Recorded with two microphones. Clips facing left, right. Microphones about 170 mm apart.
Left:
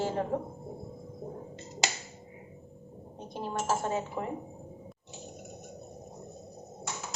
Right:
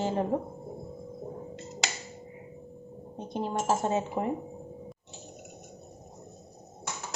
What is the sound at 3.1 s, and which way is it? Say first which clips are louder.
Dishes: right 5 dB; 20° right (ahead or behind).